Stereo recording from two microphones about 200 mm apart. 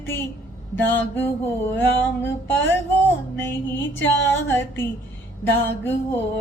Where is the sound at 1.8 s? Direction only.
10° left (ahead or behind).